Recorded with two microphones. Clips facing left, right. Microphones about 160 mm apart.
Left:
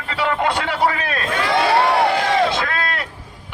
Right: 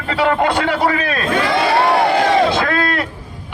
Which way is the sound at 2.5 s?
65° right (ahead or behind).